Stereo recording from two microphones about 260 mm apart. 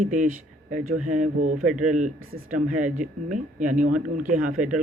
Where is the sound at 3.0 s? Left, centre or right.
Right.